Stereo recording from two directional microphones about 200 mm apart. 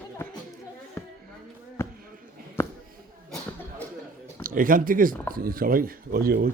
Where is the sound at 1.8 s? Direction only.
10° left (ahead or behind).